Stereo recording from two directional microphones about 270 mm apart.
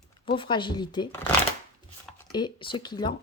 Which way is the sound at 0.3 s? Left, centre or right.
Centre.